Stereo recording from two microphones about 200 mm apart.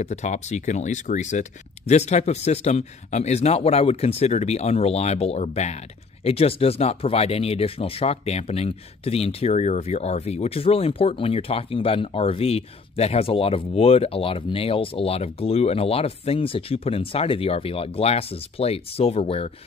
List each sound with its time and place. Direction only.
0.0 s speech: 35° left (ahead or behind)